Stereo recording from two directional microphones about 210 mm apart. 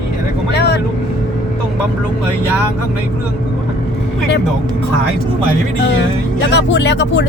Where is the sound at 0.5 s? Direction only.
50° left (ahead or behind).